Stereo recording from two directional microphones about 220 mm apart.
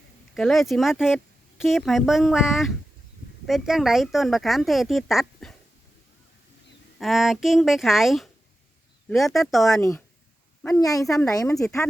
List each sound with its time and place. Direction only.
0.3 s speech: centre (ahead or behind)
7.0 s speech: centre (ahead or behind)
10.8 s speech: 15° left (ahead or behind)